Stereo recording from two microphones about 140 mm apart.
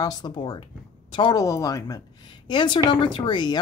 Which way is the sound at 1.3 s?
25° left (ahead or behind).